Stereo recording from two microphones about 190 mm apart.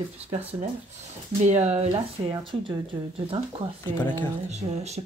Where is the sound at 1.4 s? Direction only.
35° right (ahead or behind).